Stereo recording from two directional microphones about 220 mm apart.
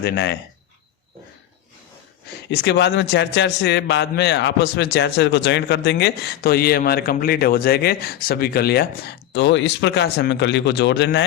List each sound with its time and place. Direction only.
0.0 s a man's voice: 50° left (ahead or behind)
2.5 s a man's voice: 50° left (ahead or behind)